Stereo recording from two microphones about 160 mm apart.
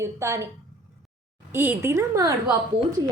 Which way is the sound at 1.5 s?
15° right (ahead or behind).